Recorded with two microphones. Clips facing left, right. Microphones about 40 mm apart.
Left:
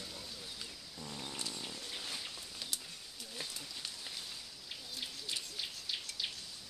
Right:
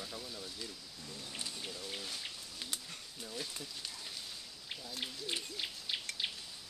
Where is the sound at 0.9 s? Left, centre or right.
Left.